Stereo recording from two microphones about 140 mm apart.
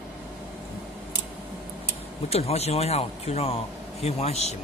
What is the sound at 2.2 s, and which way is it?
A man's voice, 45° left (ahead or behind).